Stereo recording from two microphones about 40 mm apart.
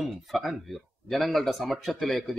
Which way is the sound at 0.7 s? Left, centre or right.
Centre.